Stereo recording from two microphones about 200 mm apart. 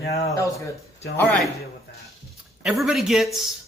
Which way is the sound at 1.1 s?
Centre (ahead or behind).